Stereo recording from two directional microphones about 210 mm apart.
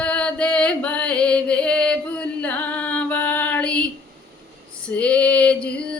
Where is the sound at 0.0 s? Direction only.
5° left (ahead or behind).